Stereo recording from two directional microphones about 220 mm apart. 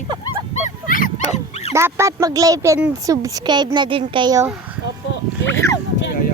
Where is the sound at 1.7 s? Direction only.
10° right (ahead or behind).